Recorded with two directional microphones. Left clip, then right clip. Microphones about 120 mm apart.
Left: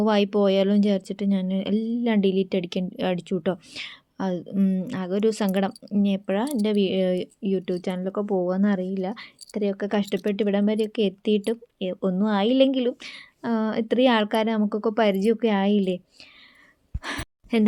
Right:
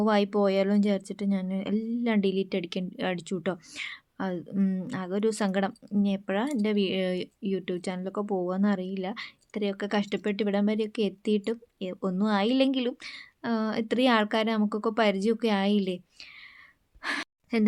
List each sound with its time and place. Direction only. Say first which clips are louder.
0.0 s speech: left 3 dB; 35° left (ahead or behind)
17.0 s gasp: right 1 dB; 35° left (ahead or behind)